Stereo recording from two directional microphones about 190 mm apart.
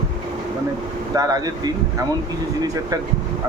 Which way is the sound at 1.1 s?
20° right (ahead or behind).